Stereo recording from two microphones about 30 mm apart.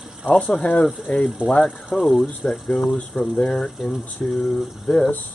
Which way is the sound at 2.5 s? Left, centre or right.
Centre.